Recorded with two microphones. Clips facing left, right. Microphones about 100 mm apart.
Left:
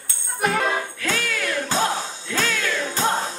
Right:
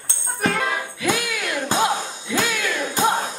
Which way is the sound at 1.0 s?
15° right (ahead or behind).